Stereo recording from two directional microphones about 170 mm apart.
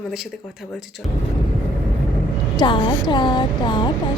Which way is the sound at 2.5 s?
25° left (ahead or behind).